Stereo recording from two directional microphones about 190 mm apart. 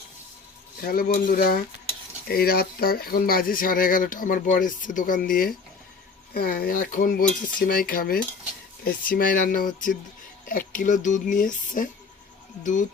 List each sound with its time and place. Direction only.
0.8 s speech: 50° left (ahead or behind)